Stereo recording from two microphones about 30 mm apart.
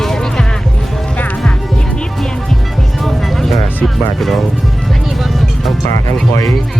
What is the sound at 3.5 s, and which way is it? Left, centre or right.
Speech, centre.